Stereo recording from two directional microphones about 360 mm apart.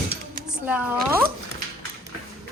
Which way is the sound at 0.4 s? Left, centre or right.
Centre.